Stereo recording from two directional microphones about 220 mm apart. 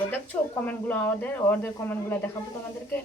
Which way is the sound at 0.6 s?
5° left (ahead or behind).